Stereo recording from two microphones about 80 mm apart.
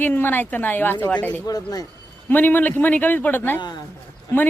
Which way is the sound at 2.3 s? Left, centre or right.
Left.